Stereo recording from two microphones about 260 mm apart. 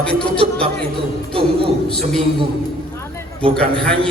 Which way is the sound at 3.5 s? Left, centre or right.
Centre.